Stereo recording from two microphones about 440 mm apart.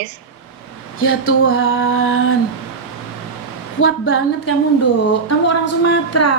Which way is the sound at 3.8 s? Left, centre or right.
Left.